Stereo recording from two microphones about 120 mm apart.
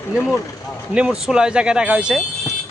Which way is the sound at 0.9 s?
5° right (ahead or behind).